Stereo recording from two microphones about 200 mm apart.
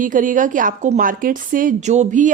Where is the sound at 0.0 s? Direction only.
40° right (ahead or behind).